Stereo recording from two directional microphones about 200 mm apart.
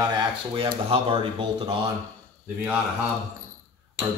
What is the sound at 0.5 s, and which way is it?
Speech, 30° right (ahead or behind).